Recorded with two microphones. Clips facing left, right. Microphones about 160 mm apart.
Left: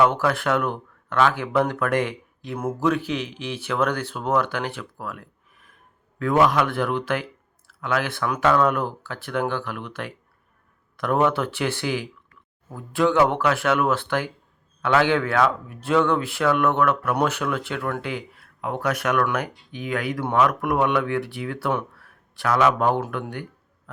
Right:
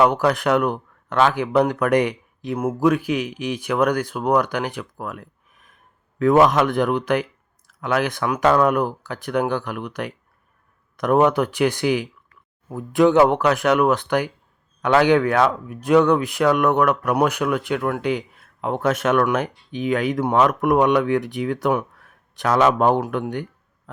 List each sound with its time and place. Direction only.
0.0 s speech: 20° right (ahead or behind)